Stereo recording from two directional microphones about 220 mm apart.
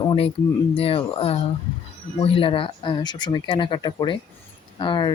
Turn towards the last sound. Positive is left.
turn(degrees=20)  # may be behind; listen again after turning